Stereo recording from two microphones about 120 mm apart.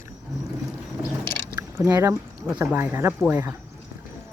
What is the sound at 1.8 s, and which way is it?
Speech, 20° right (ahead or behind).